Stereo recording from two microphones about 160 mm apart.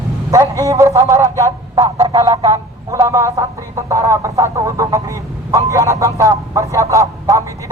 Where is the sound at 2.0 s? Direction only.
25° right (ahead or behind).